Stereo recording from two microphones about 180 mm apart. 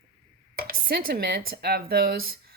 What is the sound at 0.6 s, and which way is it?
Speech, 55° right (ahead or behind).